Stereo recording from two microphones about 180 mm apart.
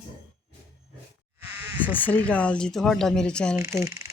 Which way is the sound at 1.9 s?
10° left (ahead or behind).